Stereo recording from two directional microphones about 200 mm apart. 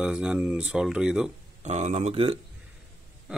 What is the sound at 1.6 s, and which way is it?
Speech, 35° right (ahead or behind).